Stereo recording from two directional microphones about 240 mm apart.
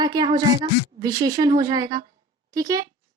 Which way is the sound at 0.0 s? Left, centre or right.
Centre.